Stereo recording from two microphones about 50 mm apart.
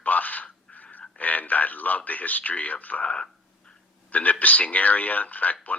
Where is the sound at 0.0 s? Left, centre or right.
Left.